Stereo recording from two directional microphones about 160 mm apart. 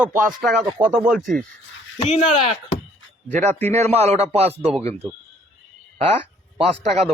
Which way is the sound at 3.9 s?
40° right (ahead or behind).